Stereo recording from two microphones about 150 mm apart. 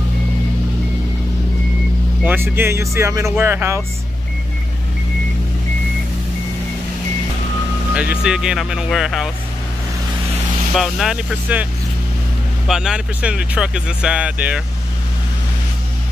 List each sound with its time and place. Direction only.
2.2 s speech: 15° right (ahead or behind)
7.9 s speech: 10° right (ahead or behind)
10.7 s speech: centre (ahead or behind)
12.6 s speech: 5° right (ahead or behind)